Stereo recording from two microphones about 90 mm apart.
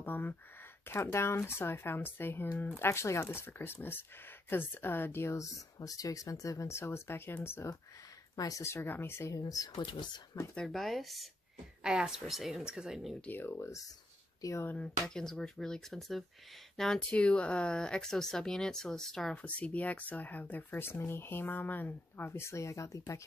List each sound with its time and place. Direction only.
0.0 s speech: 20° left (ahead or behind)
8.4 s speech: 40° left (ahead or behind)
8.7 s speech: 25° left (ahead or behind)
9.4 s speech: 45° left (ahead or behind)
9.8 s speech: 60° left (ahead or behind)
10.5 s a woman's voice: 5° left (ahead or behind)
13.3 s speech: 20° left (ahead or behind)
13.6 s speech: 35° left (ahead or behind)
14.7 s speech: 10° left (ahead or behind)
19.4 s speech: 15° left (ahead or behind); by 23.2 s 35° left (ahead or behind)